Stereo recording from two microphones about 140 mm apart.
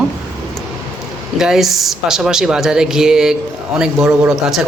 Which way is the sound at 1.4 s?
Centre (ahead or behind).